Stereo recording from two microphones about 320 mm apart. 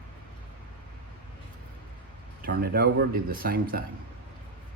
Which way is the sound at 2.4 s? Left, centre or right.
Right.